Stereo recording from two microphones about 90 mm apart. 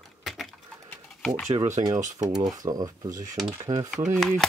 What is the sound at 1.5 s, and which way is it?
Speech, 40° right (ahead or behind).